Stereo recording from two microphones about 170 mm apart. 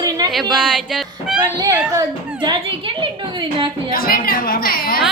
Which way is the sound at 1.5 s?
20° right (ahead or behind).